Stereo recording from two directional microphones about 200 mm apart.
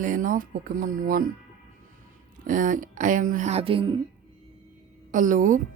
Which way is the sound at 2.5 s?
40° right (ahead or behind).